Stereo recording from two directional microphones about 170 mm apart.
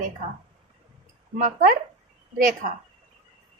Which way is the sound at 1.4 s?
50° right (ahead or behind).